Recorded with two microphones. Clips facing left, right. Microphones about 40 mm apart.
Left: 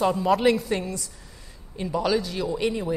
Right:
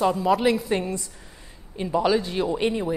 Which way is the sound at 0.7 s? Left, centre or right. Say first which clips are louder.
Right 2 dB; right.